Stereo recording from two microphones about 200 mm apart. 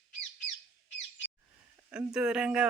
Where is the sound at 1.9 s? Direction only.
5° right (ahead or behind).